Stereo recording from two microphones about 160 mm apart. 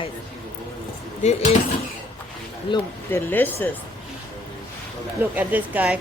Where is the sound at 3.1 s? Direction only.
10° left (ahead or behind).